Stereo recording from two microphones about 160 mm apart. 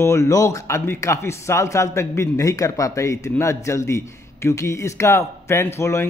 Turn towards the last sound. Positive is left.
turn(degrees=15)  # may be behind; listen again after turning